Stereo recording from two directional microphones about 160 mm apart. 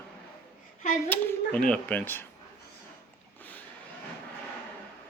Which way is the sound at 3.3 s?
10° left (ahead or behind).